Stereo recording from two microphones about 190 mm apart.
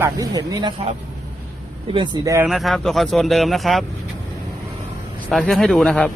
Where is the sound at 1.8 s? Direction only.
25° right (ahead or behind).